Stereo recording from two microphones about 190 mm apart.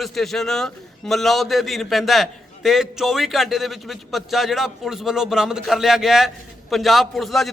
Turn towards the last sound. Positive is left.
turn(degrees=0)  # may be behind; listen again after turning